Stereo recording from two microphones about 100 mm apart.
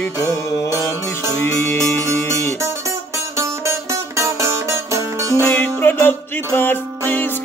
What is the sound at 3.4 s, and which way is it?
Music, 30° right (ahead or behind).